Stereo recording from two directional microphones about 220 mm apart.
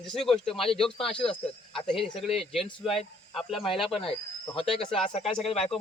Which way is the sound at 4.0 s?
25° left (ahead or behind).